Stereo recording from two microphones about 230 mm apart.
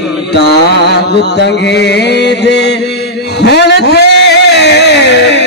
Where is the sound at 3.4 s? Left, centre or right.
Left.